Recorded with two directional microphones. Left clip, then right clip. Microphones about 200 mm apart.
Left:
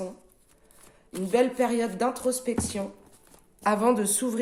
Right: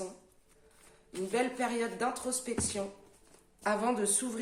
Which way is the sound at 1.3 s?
50° left (ahead or behind).